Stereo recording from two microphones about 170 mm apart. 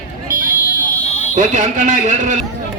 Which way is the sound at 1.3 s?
45° right (ahead or behind).